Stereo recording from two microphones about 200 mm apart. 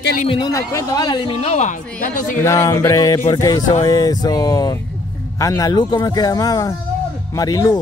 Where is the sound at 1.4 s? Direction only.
35° left (ahead or behind).